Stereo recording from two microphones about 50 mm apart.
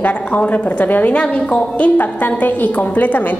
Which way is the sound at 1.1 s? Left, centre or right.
Left.